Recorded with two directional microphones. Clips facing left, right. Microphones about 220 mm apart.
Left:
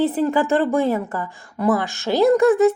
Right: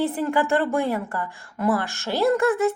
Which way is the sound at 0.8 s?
20° left (ahead or behind).